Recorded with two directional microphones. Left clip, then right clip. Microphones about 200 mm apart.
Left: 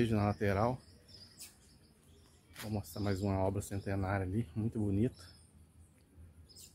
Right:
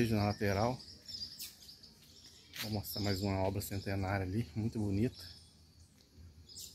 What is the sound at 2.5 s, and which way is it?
Speech, 5° left (ahead or behind).